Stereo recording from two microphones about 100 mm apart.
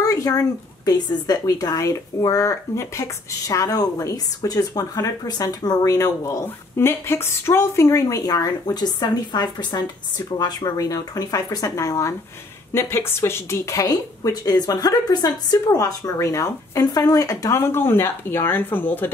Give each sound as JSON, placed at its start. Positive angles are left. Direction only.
{"t": 0.0, "sound": "speech", "side_deg": 40}